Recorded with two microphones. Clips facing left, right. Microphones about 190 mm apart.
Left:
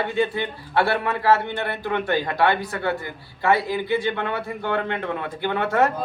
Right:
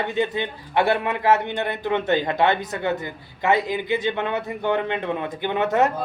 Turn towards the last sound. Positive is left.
turn(degrees=-20)  # may be behind; listen again after turning